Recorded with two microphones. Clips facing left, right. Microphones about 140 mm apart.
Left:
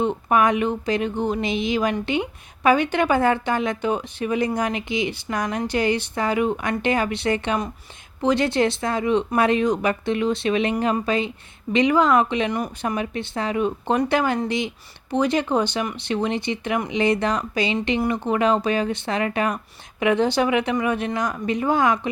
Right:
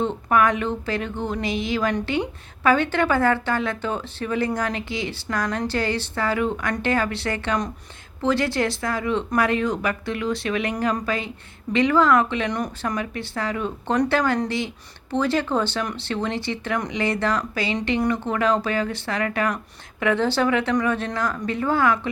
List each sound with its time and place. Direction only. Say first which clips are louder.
0.0 s speech: left 1 dB; 15° left (ahead or behind)
12.5 s speech: left 1 dB; 5° left (ahead or behind)
13.0 s speech: left 2 dB; 20° left (ahead or behind)